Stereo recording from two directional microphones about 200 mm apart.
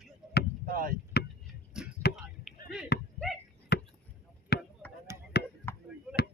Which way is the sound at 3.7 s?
55° left (ahead or behind).